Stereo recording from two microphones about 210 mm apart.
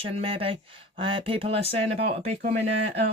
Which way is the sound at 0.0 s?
25° right (ahead or behind).